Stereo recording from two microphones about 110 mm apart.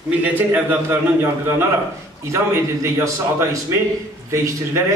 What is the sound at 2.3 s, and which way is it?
A man's voice, 25° right (ahead or behind).